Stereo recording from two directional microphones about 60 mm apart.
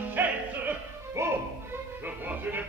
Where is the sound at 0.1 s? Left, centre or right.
Right.